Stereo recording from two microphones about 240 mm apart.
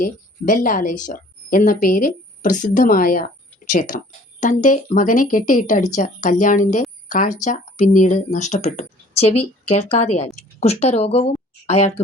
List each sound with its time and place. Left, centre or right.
0.0 s speech: left